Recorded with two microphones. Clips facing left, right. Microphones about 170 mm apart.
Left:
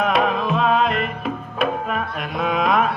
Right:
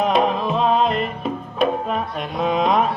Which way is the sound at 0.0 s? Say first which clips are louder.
Right 1 dB; 30° right (ahead or behind).